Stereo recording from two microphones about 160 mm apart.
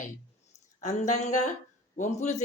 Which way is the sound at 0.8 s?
45° left (ahead or behind).